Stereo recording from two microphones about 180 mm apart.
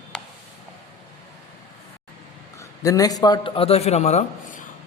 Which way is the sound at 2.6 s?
20° left (ahead or behind).